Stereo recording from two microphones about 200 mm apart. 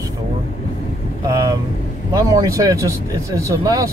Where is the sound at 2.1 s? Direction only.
15° right (ahead or behind).